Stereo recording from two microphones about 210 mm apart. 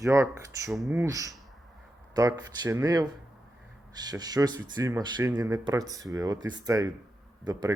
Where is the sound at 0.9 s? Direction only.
15° right (ahead or behind).